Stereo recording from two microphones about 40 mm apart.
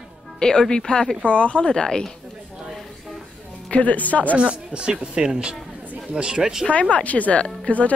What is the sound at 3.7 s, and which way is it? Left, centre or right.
Speech, left.